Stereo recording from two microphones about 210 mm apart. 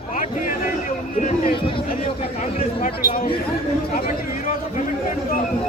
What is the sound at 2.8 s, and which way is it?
Speech, 45° left (ahead or behind).